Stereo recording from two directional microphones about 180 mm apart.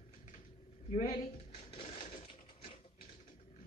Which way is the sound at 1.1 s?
35° left (ahead or behind).